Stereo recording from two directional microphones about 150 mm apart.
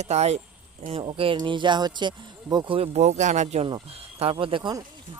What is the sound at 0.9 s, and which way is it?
Speech, 35° right (ahead or behind).